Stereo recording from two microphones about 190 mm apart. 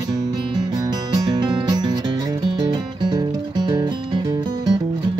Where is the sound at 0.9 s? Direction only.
20° right (ahead or behind).